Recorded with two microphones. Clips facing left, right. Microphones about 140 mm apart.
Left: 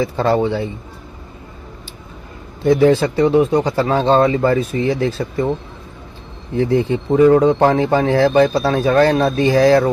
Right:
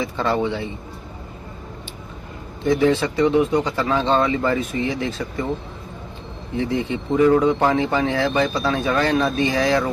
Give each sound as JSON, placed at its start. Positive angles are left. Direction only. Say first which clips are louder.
{"t": 0.0, "sound": "speech", "louder": "left 5 dB", "side_deg": 40}
{"t": 2.6, "sound": "speech", "louder": "left 5 dB", "side_deg": 35}
{"t": 6.5, "sound": "speech", "louder": "left 7 dB", "side_deg": 40}